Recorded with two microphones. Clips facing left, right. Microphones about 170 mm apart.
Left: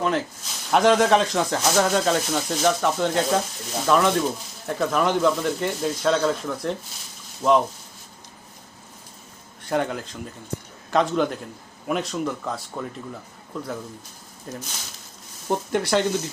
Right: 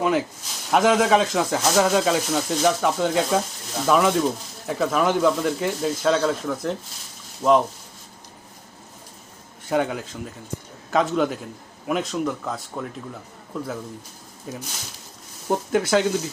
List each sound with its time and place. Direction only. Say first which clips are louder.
0.0 s speech: right 2 dB; 5° right (ahead or behind)
9.6 s speech: right 2 dB; centre (ahead or behind)